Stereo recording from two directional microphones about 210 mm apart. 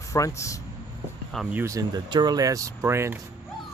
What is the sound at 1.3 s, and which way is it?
Speech, centre (ahead or behind).